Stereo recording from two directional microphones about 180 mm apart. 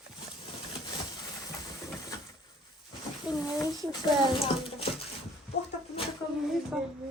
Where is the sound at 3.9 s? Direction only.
30° left (ahead or behind).